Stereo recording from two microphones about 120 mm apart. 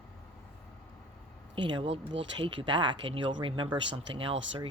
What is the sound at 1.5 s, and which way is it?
Speech, 40° right (ahead or behind).